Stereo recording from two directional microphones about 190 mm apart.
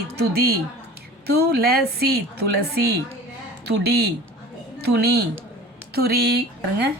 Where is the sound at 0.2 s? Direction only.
55° right (ahead or behind).